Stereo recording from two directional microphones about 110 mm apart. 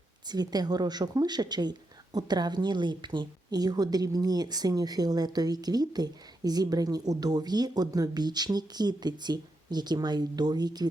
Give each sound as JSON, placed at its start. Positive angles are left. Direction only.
{"t": 0.3, "sound": "a woman's voice", "side_deg": -40}